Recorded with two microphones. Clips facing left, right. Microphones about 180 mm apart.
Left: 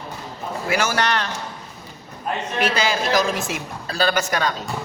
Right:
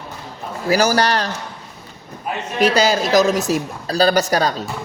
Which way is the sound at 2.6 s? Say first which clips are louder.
Right 7 dB; 40° right (ahead or behind).